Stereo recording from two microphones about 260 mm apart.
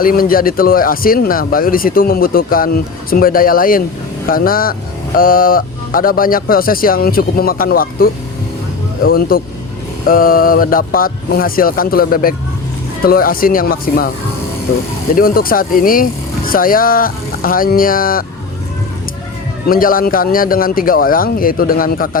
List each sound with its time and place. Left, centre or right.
0.0 s speech: left
15.1 s speech: left
19.6 s speech: left